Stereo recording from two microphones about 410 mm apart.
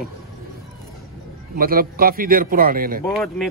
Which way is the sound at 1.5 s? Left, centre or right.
Right.